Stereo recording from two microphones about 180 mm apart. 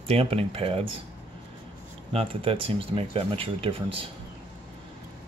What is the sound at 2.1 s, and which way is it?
Speech, 30° right (ahead or behind).